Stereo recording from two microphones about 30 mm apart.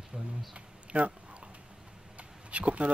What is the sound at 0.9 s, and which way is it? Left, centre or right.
Speech, right.